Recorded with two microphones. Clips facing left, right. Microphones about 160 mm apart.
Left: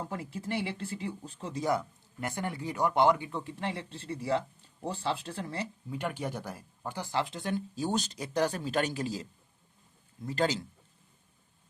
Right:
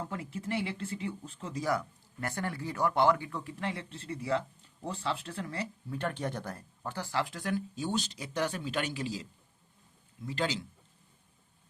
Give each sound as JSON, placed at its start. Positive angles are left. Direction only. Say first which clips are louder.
{"t": 0.1, "sound": "speech", "louder": "even", "side_deg": 35}
{"t": 5.9, "sound": "speech", "louder": "even", "side_deg": 15}
{"t": 7.8, "sound": "speech", "louder": "left 2 dB", "side_deg": 45}
{"t": 10.2, "sound": "speech", "louder": "left 4 dB", "side_deg": 45}